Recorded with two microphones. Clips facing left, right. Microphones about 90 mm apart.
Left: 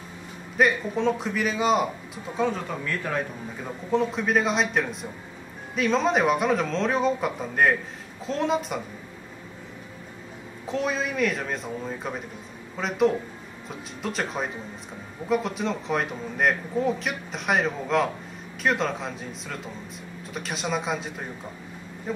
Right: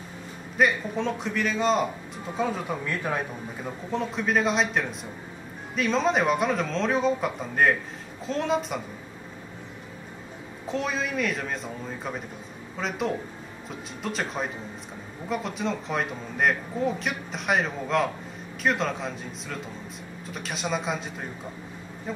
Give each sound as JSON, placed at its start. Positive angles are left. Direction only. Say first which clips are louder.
{"t": 0.6, "sound": "a man's voice", "louder": "left 1 dB", "side_deg": 0}
{"t": 2.8, "sound": "a man's voice", "louder": "even", "side_deg": -15}
{"t": 3.9, "sound": "a man's voice", "louder": "left 3 dB", "side_deg": 0}
{"t": 10.7, "sound": "a man's voice", "louder": "left 1 dB", "side_deg": 0}